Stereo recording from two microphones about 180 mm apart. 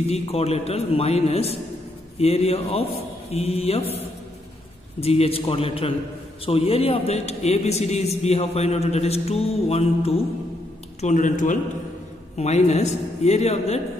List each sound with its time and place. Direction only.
0.1 s a man's voice: 35° left (ahead or behind)
5.0 s a man's voice: 35° left (ahead or behind)